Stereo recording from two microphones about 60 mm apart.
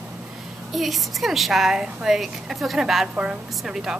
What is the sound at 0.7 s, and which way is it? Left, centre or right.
A woman's voice, centre.